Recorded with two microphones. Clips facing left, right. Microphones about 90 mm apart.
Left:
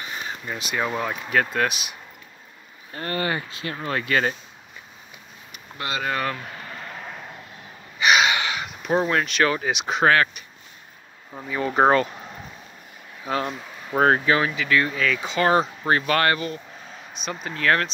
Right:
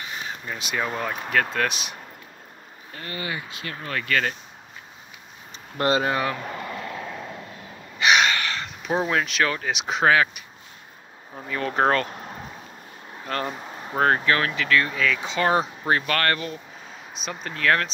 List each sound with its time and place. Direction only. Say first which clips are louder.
0.0 s speech: left 1 dB; centre (ahead or behind)
2.9 s speech: left 6 dB; 45° left (ahead or behind)
3.4 s speech: left 4 dB; 30° left (ahead or behind)
5.8 s speech: right 7 dB; 35° right (ahead or behind)
6.0 s speech: right 1 dB; 10° right (ahead or behind)
8.0 s gasp: left 1 dB; 5° left (ahead or behind)
8.3 s a sound: left 2 dB; 15° left (ahead or behind)
8.9 s speech: left 2 dB; 5° right (ahead or behind)
11.3 s speech: left 3 dB; 10° left (ahead or behind)
13.2 s speech: left 2 dB; 5° left (ahead or behind)